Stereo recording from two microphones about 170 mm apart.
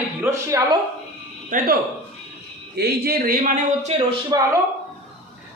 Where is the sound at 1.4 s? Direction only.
55° right (ahead or behind).